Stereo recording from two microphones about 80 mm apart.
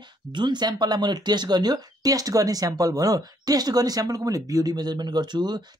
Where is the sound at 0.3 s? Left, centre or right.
Right.